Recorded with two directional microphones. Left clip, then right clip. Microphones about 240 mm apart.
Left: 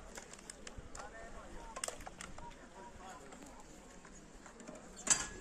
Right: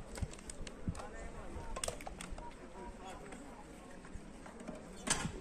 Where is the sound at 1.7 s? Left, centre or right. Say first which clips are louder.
Right 2 dB; right.